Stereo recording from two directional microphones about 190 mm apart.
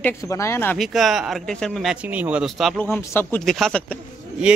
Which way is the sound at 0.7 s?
Centre (ahead or behind).